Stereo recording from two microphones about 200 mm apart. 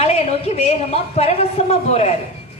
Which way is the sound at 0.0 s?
30° left (ahead or behind).